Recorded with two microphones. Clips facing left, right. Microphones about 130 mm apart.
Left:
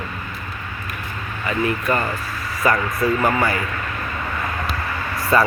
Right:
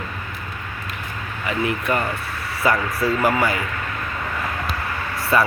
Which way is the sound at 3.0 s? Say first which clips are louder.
Left 1 dB; 15° left (ahead or behind).